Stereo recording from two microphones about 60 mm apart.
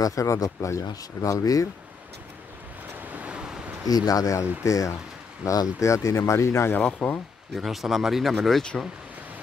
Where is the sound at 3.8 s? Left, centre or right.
Left.